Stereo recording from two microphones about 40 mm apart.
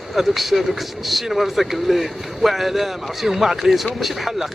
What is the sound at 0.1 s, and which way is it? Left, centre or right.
Speech, centre.